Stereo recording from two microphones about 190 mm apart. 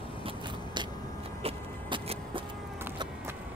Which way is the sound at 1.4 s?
30° right (ahead or behind).